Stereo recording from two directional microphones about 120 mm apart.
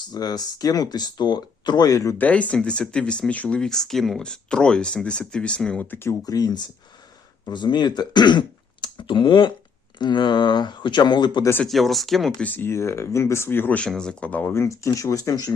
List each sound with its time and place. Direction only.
0.1 s speech: 30° left (ahead or behind)
2.1 s speech: 10° left (ahead or behind)
6.0 s speech: 25° left (ahead or behind)
11.6 s speech: centre (ahead or behind)
12.4 s speech: 15° left (ahead or behind); by 15.5 s 30° left (ahead or behind)